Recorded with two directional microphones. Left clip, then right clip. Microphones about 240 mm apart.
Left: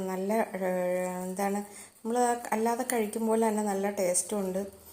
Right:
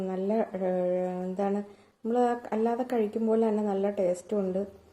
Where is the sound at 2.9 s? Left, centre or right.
Centre.